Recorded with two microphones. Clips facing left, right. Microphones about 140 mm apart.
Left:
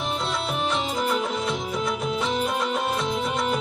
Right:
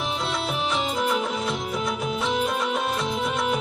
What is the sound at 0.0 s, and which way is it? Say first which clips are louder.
Music: even; centre (ahead or behind).